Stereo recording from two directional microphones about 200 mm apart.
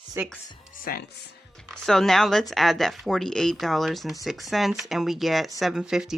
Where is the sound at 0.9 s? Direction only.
45° left (ahead or behind).